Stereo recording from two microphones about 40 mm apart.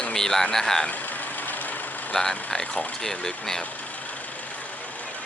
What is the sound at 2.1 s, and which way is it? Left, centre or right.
Speech, left.